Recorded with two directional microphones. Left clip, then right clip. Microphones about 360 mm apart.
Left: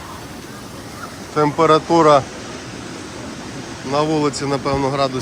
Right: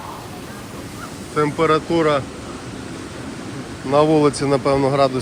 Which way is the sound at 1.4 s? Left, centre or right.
Centre.